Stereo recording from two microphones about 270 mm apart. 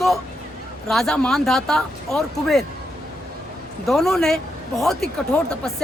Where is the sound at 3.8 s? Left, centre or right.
Centre.